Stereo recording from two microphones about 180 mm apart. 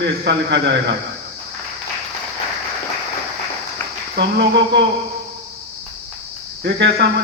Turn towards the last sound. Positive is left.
turn(degrees=-70)  # may be behind; listen again after turning